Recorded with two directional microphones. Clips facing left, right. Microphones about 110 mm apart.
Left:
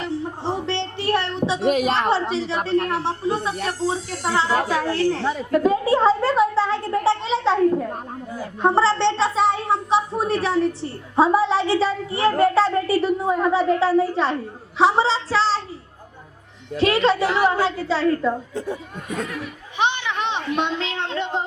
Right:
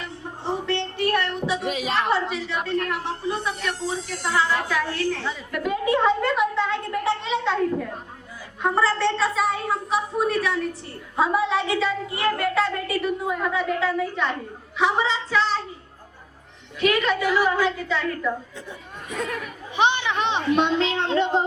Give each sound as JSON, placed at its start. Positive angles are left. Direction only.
{"t": 0.0, "sound": "music", "side_deg": 30}
{"t": 1.6, "sound": "music", "side_deg": 50}
{"t": 1.9, "sound": "speech", "side_deg": 30}
{"t": 5.2, "sound": "a woman's voice", "side_deg": 50}
{"t": 5.5, "sound": "a sound", "side_deg": 30}
{"t": 14.8, "sound": "speech", "side_deg": 35}
{"t": 16.7, "sound": "speech", "side_deg": 30}